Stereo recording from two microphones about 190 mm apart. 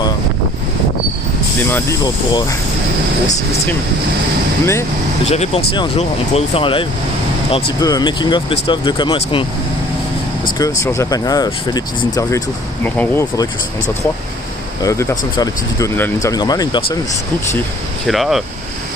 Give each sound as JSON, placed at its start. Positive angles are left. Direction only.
{"t": 1.7, "sound": "speech", "side_deg": 15}
{"t": 4.6, "sound": "speech", "side_deg": 15}
{"t": 5.2, "sound": "speech", "side_deg": 35}
{"t": 10.6, "sound": "speech", "side_deg": 15}
{"t": 14.8, "sound": "speech", "side_deg": 20}
{"t": 18.0, "sound": "speech", "side_deg": 0}